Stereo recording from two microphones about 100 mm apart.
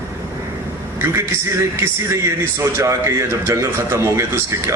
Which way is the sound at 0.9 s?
25° right (ahead or behind).